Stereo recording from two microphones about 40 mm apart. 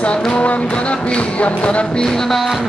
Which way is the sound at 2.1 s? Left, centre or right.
Centre.